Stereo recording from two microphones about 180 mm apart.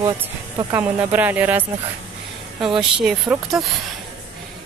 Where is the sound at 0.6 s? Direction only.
20° right (ahead or behind).